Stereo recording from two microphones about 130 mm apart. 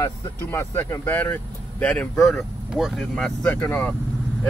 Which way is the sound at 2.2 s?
Centre (ahead or behind).